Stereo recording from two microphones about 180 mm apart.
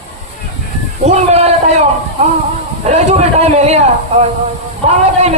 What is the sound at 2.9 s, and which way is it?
A man's voice, 40° right (ahead or behind).